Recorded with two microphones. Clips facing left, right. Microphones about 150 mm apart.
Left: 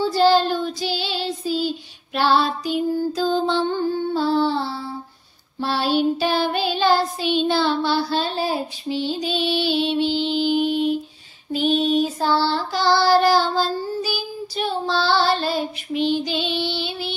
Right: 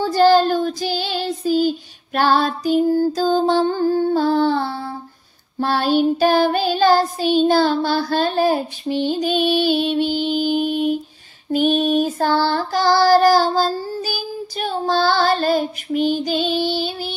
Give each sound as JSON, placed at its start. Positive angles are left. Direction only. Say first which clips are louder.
{"t": 0.0, "sound": "child singing", "louder": "right 3 dB", "side_deg": -45}